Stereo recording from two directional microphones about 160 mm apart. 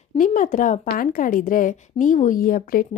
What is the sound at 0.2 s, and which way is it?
A woman's voice, 55° left (ahead or behind).